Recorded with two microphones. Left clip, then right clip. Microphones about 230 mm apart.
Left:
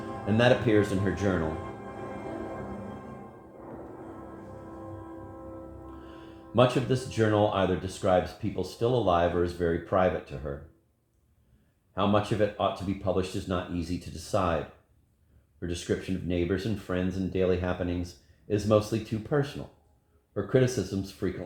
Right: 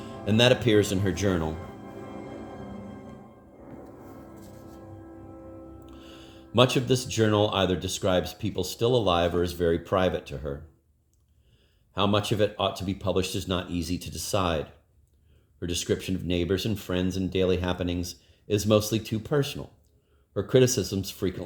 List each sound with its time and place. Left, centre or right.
0.3 s speech: right
6.5 s speech: right
11.9 s speech: right
15.7 s speech: right